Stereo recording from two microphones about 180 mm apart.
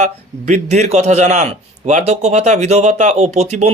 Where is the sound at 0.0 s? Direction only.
40° right (ahead or behind).